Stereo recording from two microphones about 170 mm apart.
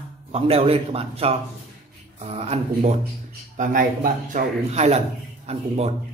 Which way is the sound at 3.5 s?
50° right (ahead or behind).